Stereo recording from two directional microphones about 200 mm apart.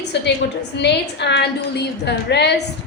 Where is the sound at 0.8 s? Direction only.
60° left (ahead or behind).